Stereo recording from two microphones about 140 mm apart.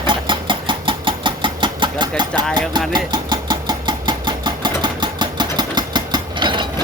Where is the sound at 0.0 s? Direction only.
35° right (ahead or behind).